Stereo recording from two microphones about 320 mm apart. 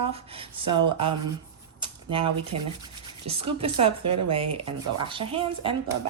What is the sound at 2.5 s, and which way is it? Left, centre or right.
Rub, right.